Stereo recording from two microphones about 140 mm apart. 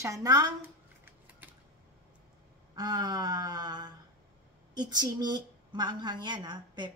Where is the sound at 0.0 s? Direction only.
25° right (ahead or behind).